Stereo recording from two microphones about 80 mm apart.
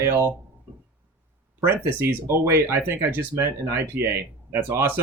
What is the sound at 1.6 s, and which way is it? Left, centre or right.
Speech, right.